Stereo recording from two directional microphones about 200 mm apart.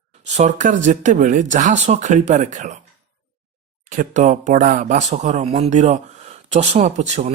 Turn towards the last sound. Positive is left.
turn(degrees=-35)  # may be behind; listen again after turning